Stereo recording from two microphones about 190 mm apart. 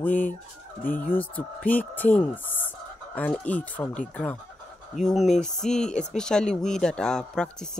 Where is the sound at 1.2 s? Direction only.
10° left (ahead or behind).